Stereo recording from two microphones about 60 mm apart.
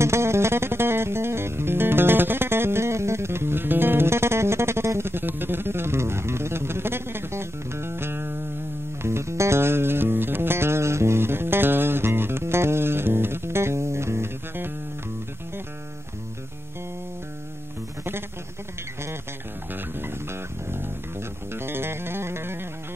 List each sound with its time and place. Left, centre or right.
0.0 s music: right
19.7 s music: right